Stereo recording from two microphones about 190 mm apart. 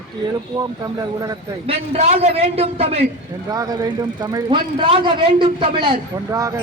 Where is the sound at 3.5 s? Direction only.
20° right (ahead or behind).